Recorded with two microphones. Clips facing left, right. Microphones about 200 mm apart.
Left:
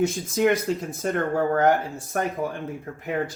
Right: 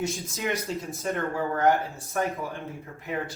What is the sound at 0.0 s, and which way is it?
Speech, 50° left (ahead or behind).